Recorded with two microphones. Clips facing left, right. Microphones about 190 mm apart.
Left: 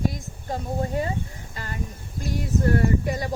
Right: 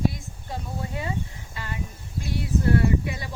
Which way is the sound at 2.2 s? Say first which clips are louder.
Left 1 dB; 45° left (ahead or behind).